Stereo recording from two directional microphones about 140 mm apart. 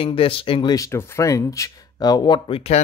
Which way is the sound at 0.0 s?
40° left (ahead or behind).